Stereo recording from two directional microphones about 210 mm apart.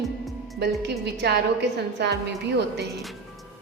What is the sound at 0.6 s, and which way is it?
A woman's voice, 55° right (ahead or behind).